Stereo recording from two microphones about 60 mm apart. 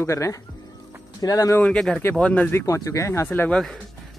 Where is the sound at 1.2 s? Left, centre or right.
Left.